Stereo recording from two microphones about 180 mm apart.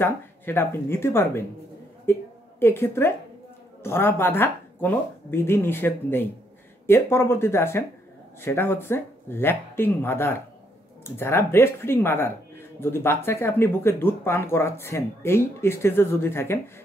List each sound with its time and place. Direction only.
0.0 s speech: 10° left (ahead or behind)